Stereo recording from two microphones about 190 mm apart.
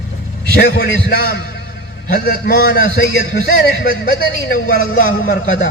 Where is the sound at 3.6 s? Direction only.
70° left (ahead or behind).